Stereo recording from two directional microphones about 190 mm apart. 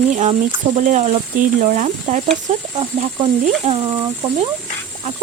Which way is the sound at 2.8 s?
30° right (ahead or behind).